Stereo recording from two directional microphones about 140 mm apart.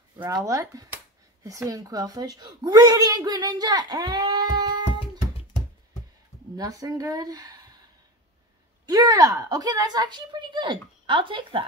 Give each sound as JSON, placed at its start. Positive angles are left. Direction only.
{"t": 0.3, "sound": "a woman's voice", "side_deg": -25}
{"t": 6.5, "sound": "a woman's voice", "side_deg": -25}
{"t": 8.8, "sound": "a woman's voice", "side_deg": -25}